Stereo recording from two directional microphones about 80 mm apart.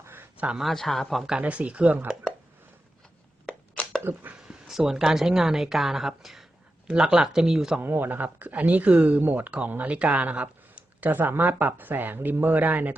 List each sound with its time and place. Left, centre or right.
0.0 s a sound: right
0.3 s speech: centre
0.6 s speech: centre
1.4 s a woman's voice: centre
4.0 s speech: right
4.7 s a woman's voice: centre
7.8 s speech: right